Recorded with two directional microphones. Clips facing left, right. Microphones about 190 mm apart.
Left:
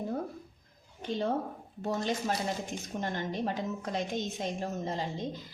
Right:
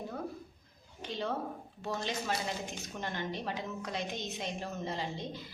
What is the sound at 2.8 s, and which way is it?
A woman's voice, 45° left (ahead or behind).